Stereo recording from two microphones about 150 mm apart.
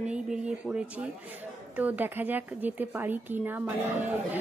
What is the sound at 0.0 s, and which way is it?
A woman's voice, 5° right (ahead or behind).